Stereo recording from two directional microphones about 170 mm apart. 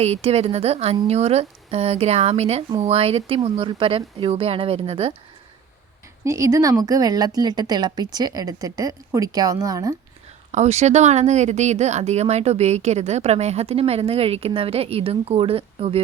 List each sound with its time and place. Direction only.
0.0 s speech: 40° right (ahead or behind)
6.2 s a woman's voice: 20° right (ahead or behind)
10.5 s speech: 40° right (ahead or behind)